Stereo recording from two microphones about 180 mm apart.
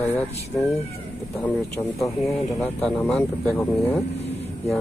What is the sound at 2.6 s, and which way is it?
Speech, 5° left (ahead or behind).